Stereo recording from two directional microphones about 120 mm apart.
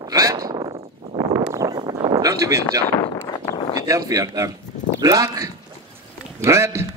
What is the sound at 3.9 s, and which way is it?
Speech, 30° right (ahead or behind).